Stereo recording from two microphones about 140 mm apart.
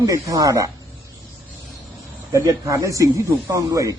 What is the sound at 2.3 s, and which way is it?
Speech, 25° right (ahead or behind).